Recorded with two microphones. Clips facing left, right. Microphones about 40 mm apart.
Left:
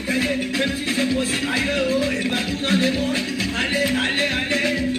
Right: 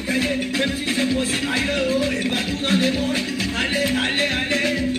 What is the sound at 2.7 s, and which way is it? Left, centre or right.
Music, right.